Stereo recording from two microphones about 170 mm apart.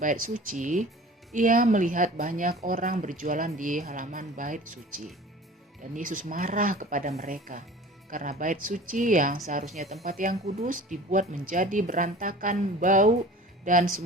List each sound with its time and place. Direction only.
0.0 s a woman's voice: 50° right (ahead or behind)
10.1 s a woman's voice: 55° right (ahead or behind)